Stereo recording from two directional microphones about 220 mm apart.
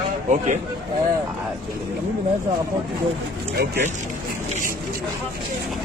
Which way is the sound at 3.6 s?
45° right (ahead or behind).